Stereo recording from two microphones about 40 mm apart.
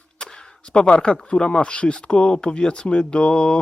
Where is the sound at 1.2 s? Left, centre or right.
Left.